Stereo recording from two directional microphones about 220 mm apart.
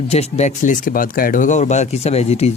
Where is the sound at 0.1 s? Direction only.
30° left (ahead or behind).